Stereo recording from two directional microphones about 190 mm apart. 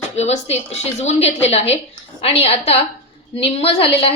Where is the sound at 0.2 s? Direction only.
35° left (ahead or behind).